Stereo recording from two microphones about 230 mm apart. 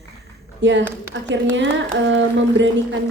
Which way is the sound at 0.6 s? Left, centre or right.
Right.